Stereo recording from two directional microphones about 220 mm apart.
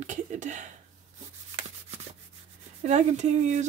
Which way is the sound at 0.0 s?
35° right (ahead or behind).